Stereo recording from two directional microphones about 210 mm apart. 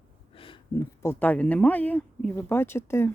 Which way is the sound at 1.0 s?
10° left (ahead or behind).